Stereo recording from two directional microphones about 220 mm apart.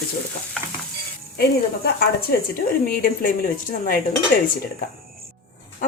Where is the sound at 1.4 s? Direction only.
45° left (ahead or behind).